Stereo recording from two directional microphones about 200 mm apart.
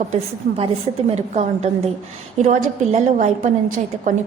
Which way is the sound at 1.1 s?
35° right (ahead or behind).